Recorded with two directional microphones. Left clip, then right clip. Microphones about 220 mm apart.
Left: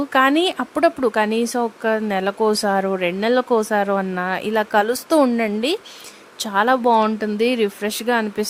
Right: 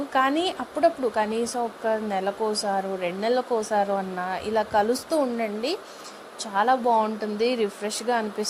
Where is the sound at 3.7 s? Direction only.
45° left (ahead or behind); by 5.2 s 65° left (ahead or behind).